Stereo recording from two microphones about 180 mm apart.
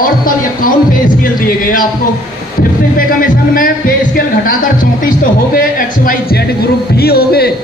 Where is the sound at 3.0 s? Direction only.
50° left (ahead or behind).